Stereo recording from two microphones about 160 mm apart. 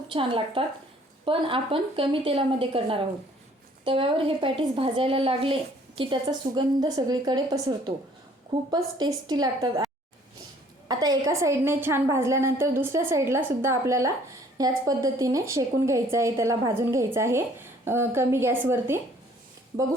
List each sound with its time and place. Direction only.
0.1 s a woman's voice: 35° right (ahead or behind)
10.8 s a woman's voice: 25° right (ahead or behind)